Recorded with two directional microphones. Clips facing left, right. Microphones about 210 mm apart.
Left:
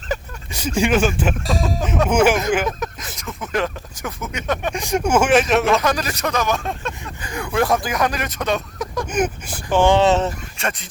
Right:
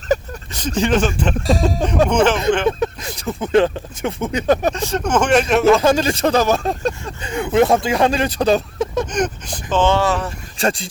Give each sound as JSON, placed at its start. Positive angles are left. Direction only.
{"t": 0.1, "sound": "vehicle", "side_deg": -40}
{"t": 0.5, "sound": "speech", "side_deg": 10}
{"t": 2.6, "sound": "speech", "side_deg": -30}
{"t": 4.7, "sound": "speech", "side_deg": 15}
{"t": 5.8, "sound": "speech", "side_deg": -25}
{"t": 9.0, "sound": "speech", "side_deg": 5}
{"t": 10.6, "sound": "speech", "side_deg": -30}